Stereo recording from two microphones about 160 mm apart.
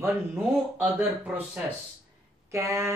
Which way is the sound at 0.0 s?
10° right (ahead or behind).